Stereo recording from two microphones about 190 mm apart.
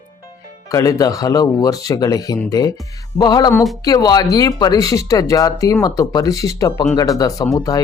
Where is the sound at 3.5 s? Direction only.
Centre (ahead or behind).